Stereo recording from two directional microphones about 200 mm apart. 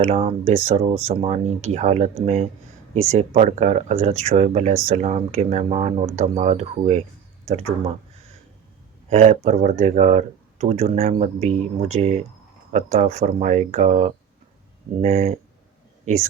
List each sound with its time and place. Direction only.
0.0 s speech: 30° right (ahead or behind)
9.0 s speech: 35° right (ahead or behind)